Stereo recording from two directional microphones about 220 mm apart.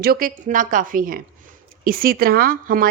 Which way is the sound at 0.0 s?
40° right (ahead or behind).